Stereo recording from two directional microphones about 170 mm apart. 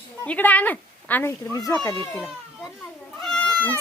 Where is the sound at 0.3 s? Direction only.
10° left (ahead or behind).